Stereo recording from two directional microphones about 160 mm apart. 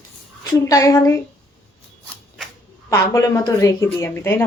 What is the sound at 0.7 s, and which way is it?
Speech, 20° left (ahead or behind).